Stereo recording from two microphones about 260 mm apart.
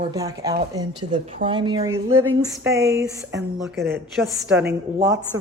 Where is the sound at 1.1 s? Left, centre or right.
Right.